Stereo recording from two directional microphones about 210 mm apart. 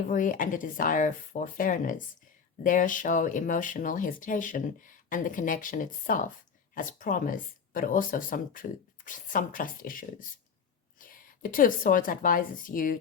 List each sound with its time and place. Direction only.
0.1 s a woman's voice: 40° left (ahead or behind)